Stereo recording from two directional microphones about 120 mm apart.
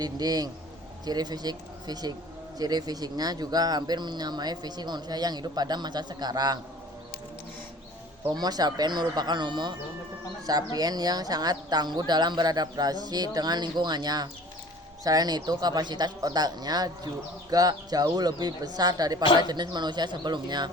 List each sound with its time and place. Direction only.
0.0 s speech: 30° right (ahead or behind)
8.4 s speech: 35° right (ahead or behind)